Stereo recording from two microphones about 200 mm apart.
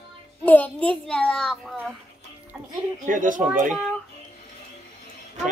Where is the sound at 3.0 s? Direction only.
40° right (ahead or behind).